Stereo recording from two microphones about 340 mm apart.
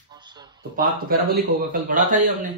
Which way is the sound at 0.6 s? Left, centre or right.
Right.